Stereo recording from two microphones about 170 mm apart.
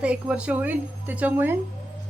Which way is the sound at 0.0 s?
5° right (ahead or behind).